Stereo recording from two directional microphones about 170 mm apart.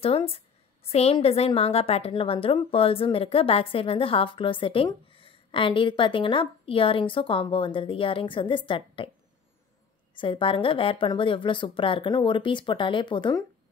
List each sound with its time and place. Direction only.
0.0 s a woman's voice: 35° left (ahead or behind)
10.1 s a woman's voice: 30° left (ahead or behind)